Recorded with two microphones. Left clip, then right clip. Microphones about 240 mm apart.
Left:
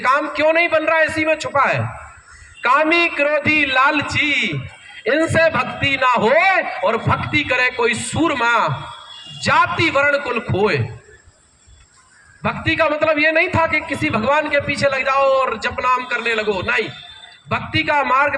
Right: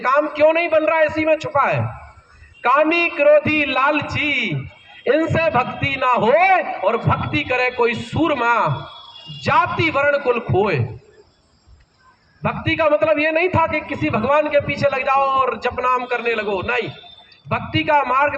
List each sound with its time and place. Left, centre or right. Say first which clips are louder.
0.0 s a man's voice: right 1 dB; left
12.4 s a man's voice: left 1 dB; left